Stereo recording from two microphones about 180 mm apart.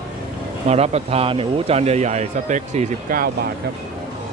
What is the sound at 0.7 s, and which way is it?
A man's voice, 35° right (ahead or behind).